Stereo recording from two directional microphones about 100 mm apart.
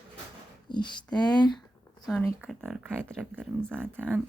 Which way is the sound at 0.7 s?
50° left (ahead or behind).